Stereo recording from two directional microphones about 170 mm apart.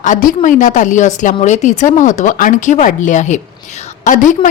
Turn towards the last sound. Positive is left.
turn(degrees=50)  # may be behind; listen again after turning